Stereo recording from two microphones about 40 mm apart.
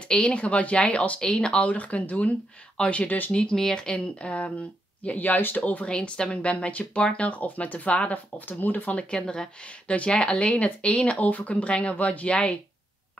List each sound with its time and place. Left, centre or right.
0.0 s speech: left
1.2 s speech: centre
1.6 s speech: left
4.3 s speech: left
5.2 s speech: left
5.9 s speech: left
8.1 s speech: left
9.1 s speech: centre; by 12.4 s left